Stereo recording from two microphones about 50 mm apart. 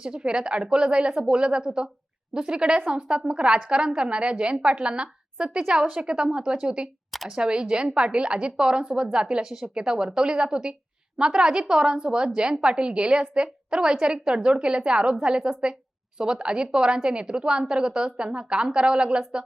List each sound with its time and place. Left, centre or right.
0.0 s a woman's voice: centre